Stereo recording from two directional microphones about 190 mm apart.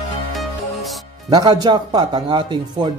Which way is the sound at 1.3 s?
20° right (ahead or behind).